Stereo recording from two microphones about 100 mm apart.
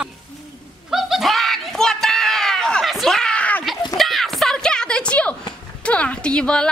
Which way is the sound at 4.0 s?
Centre (ahead or behind).